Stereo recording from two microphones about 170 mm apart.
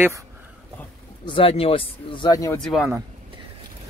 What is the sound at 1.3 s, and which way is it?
Speech, 30° left (ahead or behind).